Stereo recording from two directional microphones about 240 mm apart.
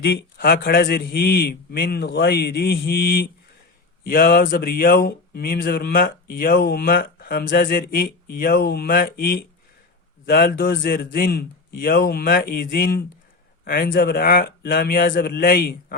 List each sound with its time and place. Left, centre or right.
0.0 s speech: left